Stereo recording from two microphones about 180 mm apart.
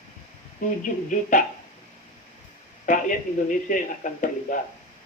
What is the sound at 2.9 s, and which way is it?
Speech, 45° left (ahead or behind).